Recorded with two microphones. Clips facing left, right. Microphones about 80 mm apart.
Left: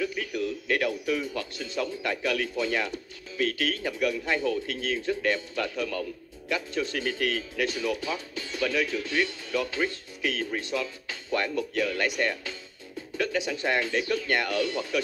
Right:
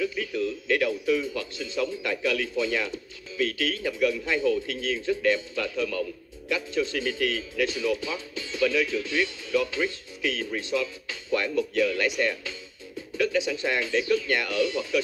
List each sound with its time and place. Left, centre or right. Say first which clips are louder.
0.4 s a sound: right 3 dB; left
0.8 s music: right 3 dB; left
1.2 s speech: right 1 dB; left
4.0 s a man's voice: right 3 dB; left
4.3 s speech: right 2 dB; left